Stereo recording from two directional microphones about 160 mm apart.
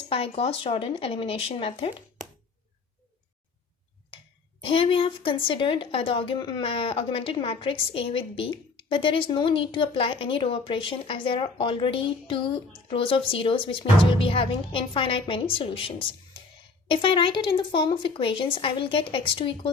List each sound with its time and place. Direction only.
0.1 s speech: 35° left (ahead or behind)
4.6 s speech: 35° left (ahead or behind)